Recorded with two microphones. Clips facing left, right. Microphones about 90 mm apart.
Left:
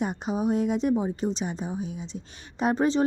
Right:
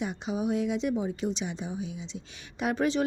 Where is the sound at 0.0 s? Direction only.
45° left (ahead or behind).